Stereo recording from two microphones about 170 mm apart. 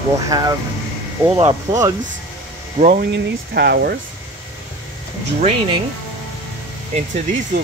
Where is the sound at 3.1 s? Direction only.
70° right (ahead or behind).